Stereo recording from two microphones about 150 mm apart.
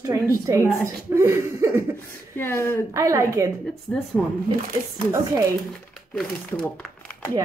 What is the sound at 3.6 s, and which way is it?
Speech, 5° left (ahead or behind).